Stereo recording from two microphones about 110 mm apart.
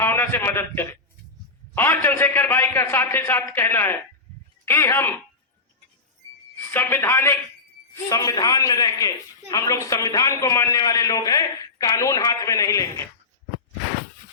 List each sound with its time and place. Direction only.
0.0 s a man's voice: 20° left (ahead or behind)
6.6 s a man's voice: 20° left (ahead or behind)
8.1 s speech: 35° left (ahead or behind)